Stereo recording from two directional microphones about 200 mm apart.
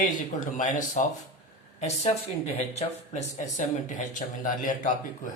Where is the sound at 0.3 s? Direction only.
40° left (ahead or behind).